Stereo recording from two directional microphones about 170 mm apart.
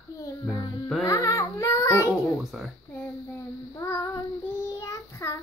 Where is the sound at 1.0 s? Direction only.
20° left (ahead or behind).